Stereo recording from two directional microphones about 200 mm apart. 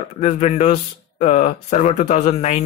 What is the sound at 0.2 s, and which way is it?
Speech, 35° left (ahead or behind).